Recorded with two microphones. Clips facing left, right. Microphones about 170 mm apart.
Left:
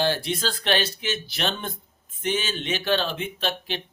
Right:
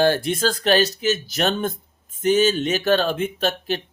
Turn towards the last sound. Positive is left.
turn(degrees=-45)  # may be behind; listen again after turning